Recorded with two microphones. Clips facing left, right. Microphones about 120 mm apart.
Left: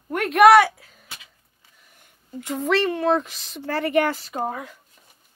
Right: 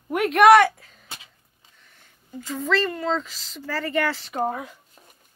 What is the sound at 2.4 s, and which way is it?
A woman's voice, 65° left (ahead or behind).